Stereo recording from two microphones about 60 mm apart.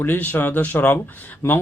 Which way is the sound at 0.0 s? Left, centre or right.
Left.